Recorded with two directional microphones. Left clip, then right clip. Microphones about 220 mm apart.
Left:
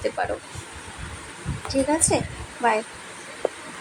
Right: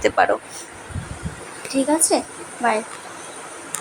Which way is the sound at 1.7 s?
20° right (ahead or behind).